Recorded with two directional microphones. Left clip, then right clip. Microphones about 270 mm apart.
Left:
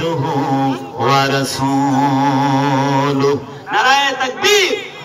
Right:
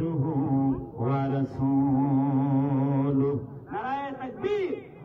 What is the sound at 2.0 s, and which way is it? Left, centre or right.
Mantra, centre.